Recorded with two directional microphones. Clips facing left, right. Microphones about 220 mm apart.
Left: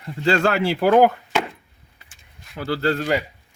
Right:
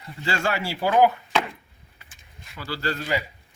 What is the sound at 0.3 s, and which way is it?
Speech, 60° left (ahead or behind).